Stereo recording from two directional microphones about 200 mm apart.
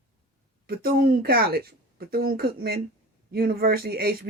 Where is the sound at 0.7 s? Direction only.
50° right (ahead or behind).